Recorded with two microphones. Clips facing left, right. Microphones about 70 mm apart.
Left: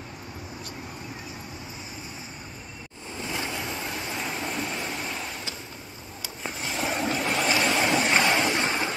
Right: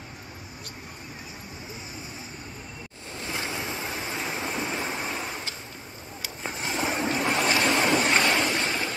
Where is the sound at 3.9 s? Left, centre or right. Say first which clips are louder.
Even; centre.